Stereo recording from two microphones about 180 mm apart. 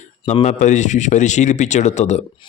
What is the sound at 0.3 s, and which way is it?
A man's voice, 40° left (ahead or behind).